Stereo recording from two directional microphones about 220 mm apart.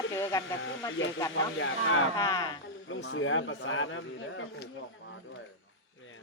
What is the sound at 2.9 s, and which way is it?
A man's voice, 60° left (ahead or behind).